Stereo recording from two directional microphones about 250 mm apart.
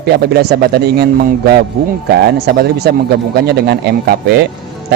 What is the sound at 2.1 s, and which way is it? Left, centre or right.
A man's voice, right.